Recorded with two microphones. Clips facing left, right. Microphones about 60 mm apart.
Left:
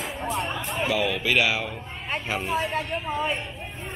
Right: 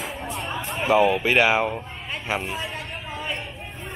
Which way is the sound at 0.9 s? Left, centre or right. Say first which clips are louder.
Right 7 dB; right.